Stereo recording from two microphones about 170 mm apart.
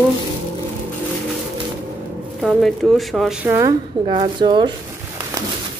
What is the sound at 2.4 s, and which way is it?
Speech, centre (ahead or behind).